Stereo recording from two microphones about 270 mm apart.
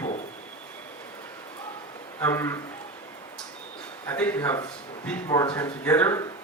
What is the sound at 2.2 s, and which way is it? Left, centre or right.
Speech, centre.